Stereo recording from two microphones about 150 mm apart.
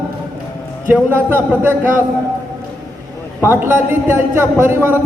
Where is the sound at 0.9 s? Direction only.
10° right (ahead or behind).